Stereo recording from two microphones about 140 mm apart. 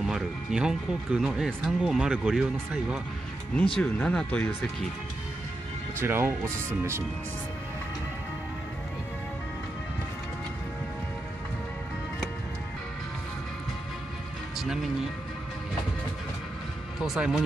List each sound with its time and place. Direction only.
0.0 s speech: 5° right (ahead or behind)
3.7 s speech: 5° left (ahead or behind)
5.9 s speech: 15° right (ahead or behind)
14.6 s speech: 5° right (ahead or behind)
17.0 s speech: 5° right (ahead or behind)